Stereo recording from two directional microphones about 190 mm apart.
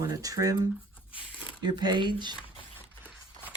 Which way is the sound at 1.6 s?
20° right (ahead or behind).